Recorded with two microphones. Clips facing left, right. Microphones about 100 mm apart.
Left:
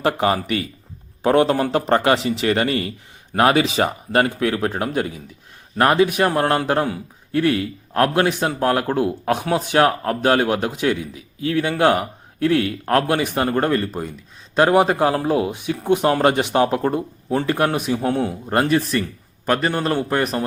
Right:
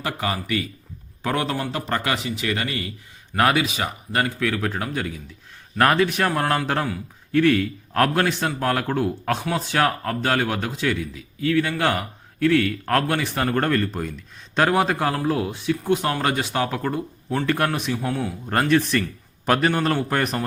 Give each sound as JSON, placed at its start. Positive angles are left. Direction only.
{"t": 0.0, "sound": "a man's voice", "side_deg": 30}
{"t": 5.8, "sound": "a man's voice", "side_deg": 15}
{"t": 6.3, "sound": "a man's voice", "side_deg": 30}
{"t": 16.4, "sound": "a man's voice", "side_deg": 20}
{"t": 17.9, "sound": "a man's voice", "side_deg": 30}
{"t": 18.7, "sound": "speech", "side_deg": 5}